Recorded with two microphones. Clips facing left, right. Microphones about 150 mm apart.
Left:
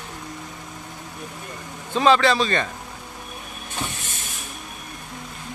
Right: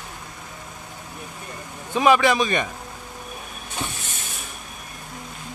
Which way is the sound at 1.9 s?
15° right (ahead or behind).